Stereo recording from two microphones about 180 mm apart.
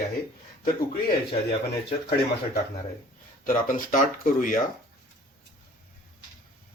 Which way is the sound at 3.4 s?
50° left (ahead or behind).